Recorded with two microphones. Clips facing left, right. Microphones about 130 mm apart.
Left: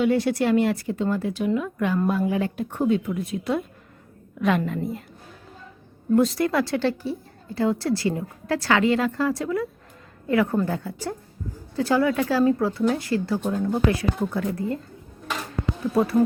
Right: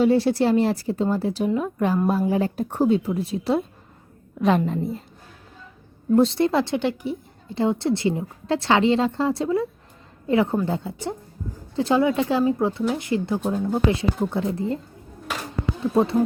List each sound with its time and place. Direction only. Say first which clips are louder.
0.0 s a woman's voice: right 3 dB; 30° right (ahead or behind)
6.1 s a woman's voice: right 2 dB; 25° right (ahead or behind)